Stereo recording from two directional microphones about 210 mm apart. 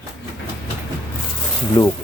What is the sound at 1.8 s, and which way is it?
Speech, 15° left (ahead or behind).